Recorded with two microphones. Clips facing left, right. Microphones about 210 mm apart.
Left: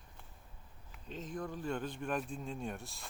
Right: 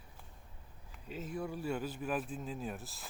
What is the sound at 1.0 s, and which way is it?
Speech, 10° right (ahead or behind).